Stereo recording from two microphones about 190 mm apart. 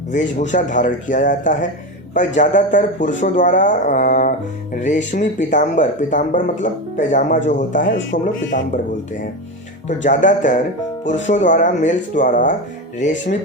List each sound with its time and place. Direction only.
0.1 s speech: 40° left (ahead or behind)
9.8 s speech: 40° left (ahead or behind)